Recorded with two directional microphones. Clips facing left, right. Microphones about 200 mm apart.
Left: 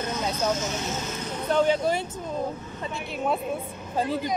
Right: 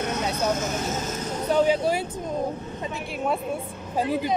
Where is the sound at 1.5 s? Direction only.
10° right (ahead or behind).